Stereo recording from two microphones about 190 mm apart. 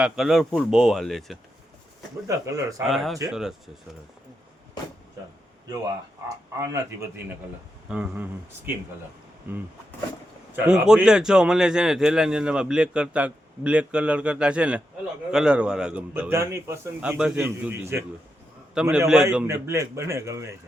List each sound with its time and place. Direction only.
0.0 s speech: centre (ahead or behind)
2.2 s a man's voice: 15° right (ahead or behind)
2.9 s speech: centre (ahead or behind)
7.9 s a man's voice: 5° right (ahead or behind)